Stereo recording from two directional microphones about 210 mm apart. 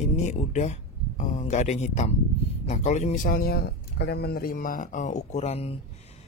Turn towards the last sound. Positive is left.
turn(degrees=30)  # may be behind; listen again after turning